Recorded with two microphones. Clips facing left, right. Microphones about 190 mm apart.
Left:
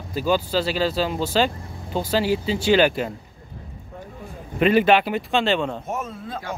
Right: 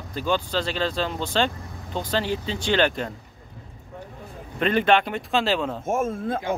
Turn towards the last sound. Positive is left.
turn(degrees=-50)  # may be behind; listen again after turning